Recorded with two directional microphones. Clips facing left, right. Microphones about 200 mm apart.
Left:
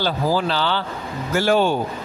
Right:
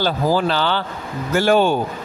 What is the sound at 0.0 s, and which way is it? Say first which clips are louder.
A man's voice: right 2 dB; 50° right (ahead or behind).